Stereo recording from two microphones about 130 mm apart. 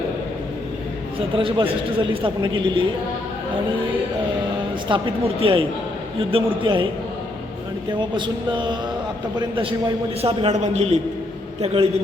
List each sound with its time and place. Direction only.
1.4 s a man's voice: 40° right (ahead or behind)
4.9 s a man's voice: 40° right (ahead or behind)
7.9 s a man's voice: 35° right (ahead or behind)
10.2 s a man's voice: 50° right (ahead or behind)